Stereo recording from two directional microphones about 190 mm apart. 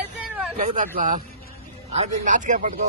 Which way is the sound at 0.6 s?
40° right (ahead or behind).